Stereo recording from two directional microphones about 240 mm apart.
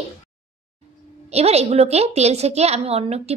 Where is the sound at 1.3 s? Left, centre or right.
Right.